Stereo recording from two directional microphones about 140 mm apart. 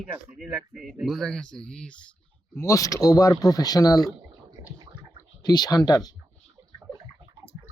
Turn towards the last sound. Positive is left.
turn(degrees=-20)  # may be behind; listen again after turning